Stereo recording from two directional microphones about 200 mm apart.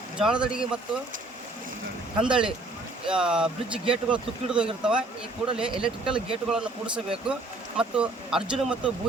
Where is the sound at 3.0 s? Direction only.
5° right (ahead or behind).